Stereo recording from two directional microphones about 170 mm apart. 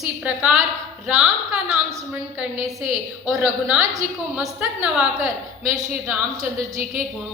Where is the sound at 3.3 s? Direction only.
5° right (ahead or behind).